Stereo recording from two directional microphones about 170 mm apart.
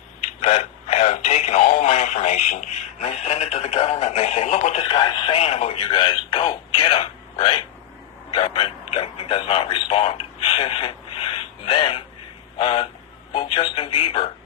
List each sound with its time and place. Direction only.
0.4 s speech: 40° left (ahead or behind)
4.9 s speech: 25° left (ahead or behind)